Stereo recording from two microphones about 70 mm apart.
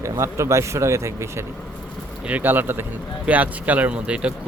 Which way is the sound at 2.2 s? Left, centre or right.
Right.